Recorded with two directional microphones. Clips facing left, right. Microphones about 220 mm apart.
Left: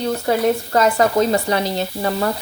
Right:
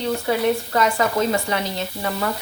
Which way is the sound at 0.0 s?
40° left (ahead or behind).